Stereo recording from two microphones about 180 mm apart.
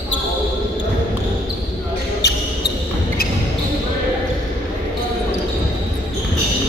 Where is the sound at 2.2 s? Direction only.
65° left (ahead or behind).